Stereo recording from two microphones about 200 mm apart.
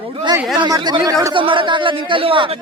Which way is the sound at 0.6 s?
20° right (ahead or behind).